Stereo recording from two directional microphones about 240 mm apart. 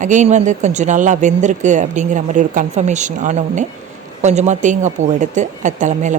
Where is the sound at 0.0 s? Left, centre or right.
Right.